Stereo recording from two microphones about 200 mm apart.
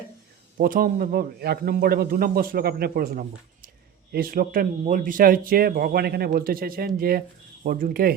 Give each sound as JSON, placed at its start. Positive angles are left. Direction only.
{"t": 0.5, "sound": "speech", "side_deg": -45}